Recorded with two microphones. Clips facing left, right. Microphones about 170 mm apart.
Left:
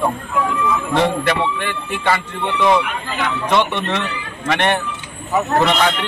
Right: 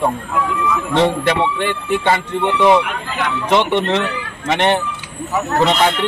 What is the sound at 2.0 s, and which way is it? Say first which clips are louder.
A man's voice: left 1 dB; 25° right (ahead or behind).